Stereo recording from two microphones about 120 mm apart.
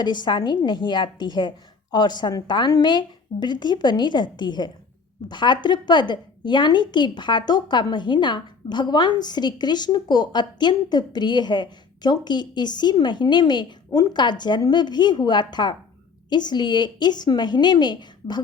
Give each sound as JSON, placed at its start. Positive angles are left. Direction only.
{"t": 0.0, "sound": "a woman's voice", "side_deg": 40}